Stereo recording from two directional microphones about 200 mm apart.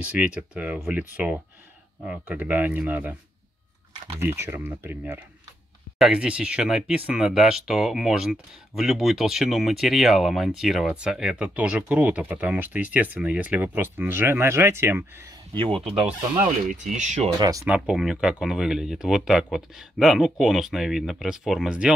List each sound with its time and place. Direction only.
0.0 s speech: 5° right (ahead or behind)
4.2 s speech: 10° right (ahead or behind)
15.7 s speech: centre (ahead or behind)
16.7 s speech: 35° right (ahead or behind)
17.4 s speech: 15° right (ahead or behind)